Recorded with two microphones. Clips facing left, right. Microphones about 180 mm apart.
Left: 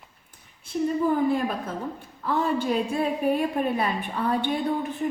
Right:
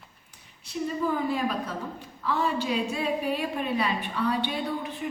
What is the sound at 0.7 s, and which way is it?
A woman's voice, 50° left (ahead or behind).